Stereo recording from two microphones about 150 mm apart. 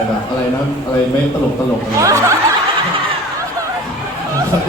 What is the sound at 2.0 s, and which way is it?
Snicker, 20° right (ahead or behind).